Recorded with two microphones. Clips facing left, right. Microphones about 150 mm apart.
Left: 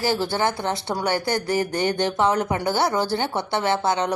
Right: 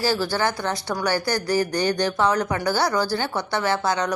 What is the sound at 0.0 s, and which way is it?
Speech, 20° left (ahead or behind).